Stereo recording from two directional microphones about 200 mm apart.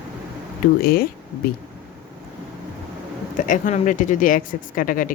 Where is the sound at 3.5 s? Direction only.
40° left (ahead or behind).